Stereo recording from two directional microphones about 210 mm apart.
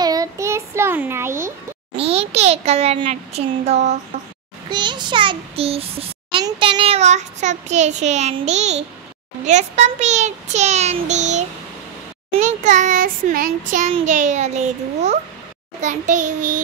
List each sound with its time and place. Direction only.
0.0 s child singing: 15° right (ahead or behind)
2.0 s a child's voice: 30° right (ahead or behind)
4.6 s a child's voice: 20° right (ahead or behind); by 16.5 s 35° right (ahead or behind)